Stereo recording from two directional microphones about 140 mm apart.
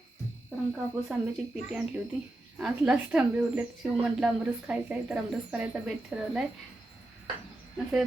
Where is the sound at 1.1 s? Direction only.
5° right (ahead or behind).